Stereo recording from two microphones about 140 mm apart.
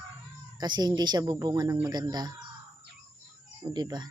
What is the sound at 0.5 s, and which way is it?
A woman's voice, 30° right (ahead or behind).